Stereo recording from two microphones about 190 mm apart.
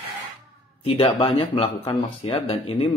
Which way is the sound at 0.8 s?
30° left (ahead or behind).